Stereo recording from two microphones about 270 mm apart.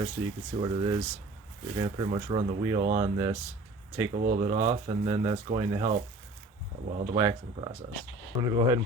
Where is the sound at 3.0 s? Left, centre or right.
Centre.